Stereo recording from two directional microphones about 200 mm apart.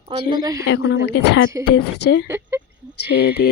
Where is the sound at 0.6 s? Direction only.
75° left (ahead or behind).